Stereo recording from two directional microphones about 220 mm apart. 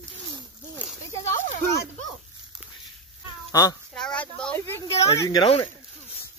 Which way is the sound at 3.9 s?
5° left (ahead or behind).